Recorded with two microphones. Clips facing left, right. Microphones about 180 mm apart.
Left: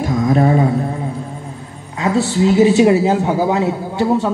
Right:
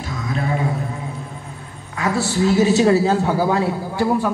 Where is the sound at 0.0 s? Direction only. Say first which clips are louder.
Left 11 dB; 45° left (ahead or behind).